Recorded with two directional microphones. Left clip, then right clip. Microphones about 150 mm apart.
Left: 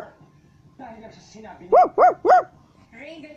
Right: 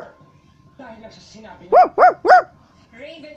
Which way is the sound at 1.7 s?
5° right (ahead or behind).